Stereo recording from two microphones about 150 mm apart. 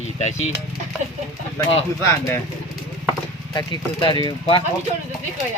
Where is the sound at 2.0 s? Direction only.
20° left (ahead or behind).